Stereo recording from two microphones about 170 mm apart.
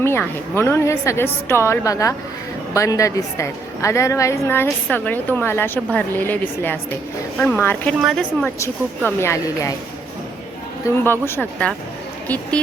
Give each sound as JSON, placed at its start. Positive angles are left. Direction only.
{"t": 0.0, "sound": "a woman's voice", "side_deg": 15}
{"t": 9.0, "sound": "a woman's voice", "side_deg": 15}
{"t": 10.8, "sound": "a woman's voice", "side_deg": 15}